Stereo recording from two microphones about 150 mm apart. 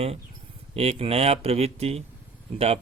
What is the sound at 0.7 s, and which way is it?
Speech, 40° right (ahead or behind).